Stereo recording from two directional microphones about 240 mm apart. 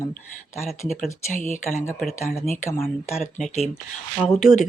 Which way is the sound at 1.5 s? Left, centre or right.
Left.